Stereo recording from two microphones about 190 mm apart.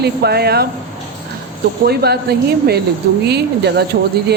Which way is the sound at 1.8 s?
55° right (ahead or behind).